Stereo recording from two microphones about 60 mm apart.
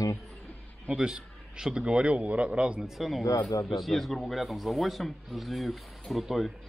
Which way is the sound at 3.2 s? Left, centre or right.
Left.